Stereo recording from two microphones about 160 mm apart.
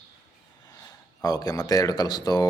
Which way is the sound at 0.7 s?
20° left (ahead or behind).